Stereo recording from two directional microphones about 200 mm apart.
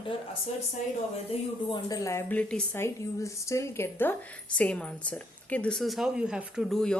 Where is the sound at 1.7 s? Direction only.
20° left (ahead or behind); by 7.0 s centre (ahead or behind).